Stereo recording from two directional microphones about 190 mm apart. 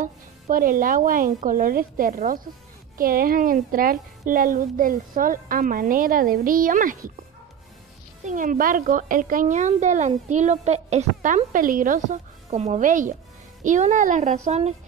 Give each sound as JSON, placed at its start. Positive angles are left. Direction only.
{"t": 0.0, "sound": "a woman's voice", "side_deg": -45}
{"t": 8.2, "sound": "a woman's voice", "side_deg": -40}